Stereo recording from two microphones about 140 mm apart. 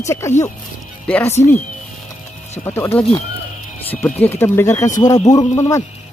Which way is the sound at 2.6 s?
15° left (ahead or behind).